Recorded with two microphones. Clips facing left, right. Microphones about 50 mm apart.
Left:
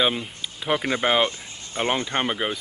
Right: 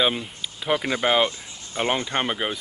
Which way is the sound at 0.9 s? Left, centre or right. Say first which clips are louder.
Even; centre.